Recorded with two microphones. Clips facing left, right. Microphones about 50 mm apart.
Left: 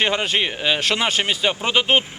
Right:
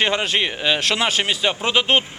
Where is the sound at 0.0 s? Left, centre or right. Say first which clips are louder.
Even; centre.